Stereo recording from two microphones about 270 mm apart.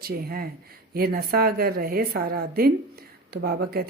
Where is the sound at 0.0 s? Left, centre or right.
Right.